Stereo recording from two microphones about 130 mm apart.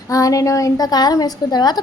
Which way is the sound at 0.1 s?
25° left (ahead or behind).